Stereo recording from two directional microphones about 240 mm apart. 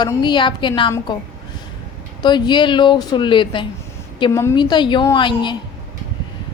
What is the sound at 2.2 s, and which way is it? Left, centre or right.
A woman's voice, centre.